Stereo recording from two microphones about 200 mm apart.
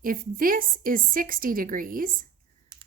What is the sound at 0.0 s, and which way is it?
Speech, 45° right (ahead or behind).